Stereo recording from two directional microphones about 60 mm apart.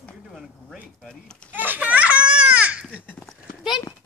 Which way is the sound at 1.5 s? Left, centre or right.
Right.